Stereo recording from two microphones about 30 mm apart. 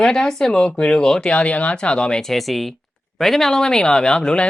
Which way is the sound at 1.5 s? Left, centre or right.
Left.